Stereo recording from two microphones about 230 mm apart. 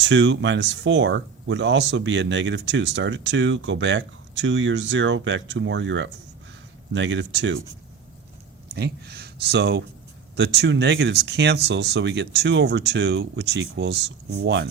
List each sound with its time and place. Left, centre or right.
0.0 s speech: right
8.7 s speech: right